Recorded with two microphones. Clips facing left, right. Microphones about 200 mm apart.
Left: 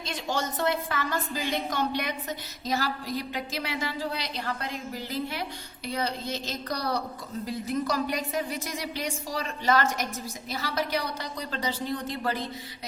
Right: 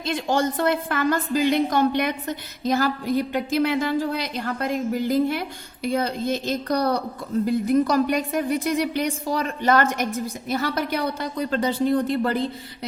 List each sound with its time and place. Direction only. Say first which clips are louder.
0.0 s a woman's voice: right 8 dB; 55° right (ahead or behind)